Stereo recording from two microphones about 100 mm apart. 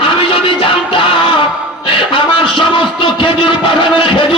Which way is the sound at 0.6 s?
60° left (ahead or behind).